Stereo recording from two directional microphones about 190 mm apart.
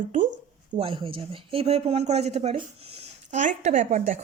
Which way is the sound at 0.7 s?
30° right (ahead or behind).